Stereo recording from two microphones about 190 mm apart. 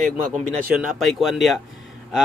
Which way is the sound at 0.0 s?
40° right (ahead or behind).